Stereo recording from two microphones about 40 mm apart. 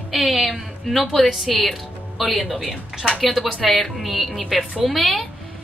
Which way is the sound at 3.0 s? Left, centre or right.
Centre.